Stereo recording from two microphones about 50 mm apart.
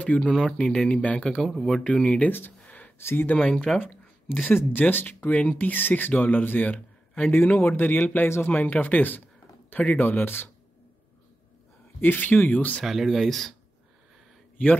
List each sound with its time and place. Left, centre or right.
0.0 s speech: left
0.3 s speech: centre
0.6 s speech: left
1.5 s speech: centre
2.0 s speech: left
2.6 s a sound: left
3.0 s speech: left
3.3 s speech: centre
4.6 s speech: left
5.7 s speech: left
12.0 s speech: left
12.8 s speech: centre